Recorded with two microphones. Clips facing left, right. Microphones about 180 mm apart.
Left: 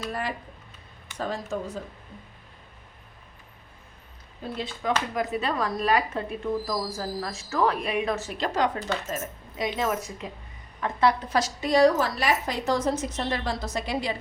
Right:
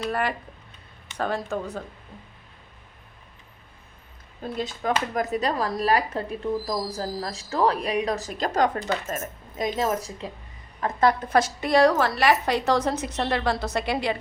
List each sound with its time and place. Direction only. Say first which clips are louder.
0.1 s a woman's voice: right 5 dB; 65° right (ahead or behind)
4.5 s a woman's voice: right 2 dB; 45° right (ahead or behind); by 10.3 s 30° right (ahead or behind)
10.8 s a woman's voice: right 2 dB; 40° right (ahead or behind); by 14.2 s 65° right (ahead or behind)